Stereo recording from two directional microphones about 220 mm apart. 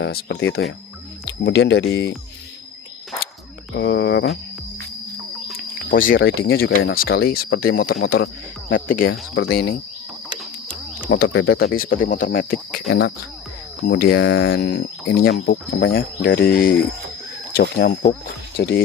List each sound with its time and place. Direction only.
0.0 s speech: 50° left (ahead or behind)
3.8 s speech: 50° left (ahead or behind)
5.9 s speech: 40° left (ahead or behind)
9.3 s speech: 50° left (ahead or behind)
11.1 s speech: 55° left (ahead or behind)
14.3 s speech: 65° left (ahead or behind)
15.0 s speech: 45° left (ahead or behind)